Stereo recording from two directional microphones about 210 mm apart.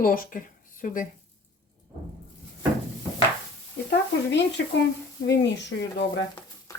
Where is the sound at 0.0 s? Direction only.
40° left (ahead or behind).